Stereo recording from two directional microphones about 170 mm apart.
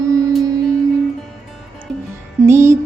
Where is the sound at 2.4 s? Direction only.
15° right (ahead or behind).